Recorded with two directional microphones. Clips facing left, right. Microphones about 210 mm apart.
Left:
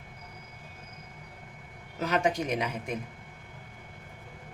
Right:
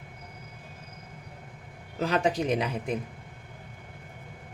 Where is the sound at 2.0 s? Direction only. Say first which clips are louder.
Right 2 dB; 30° right (ahead or behind).